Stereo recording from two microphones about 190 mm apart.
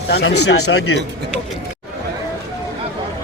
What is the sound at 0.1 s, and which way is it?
Speech, 65° left (ahead or behind).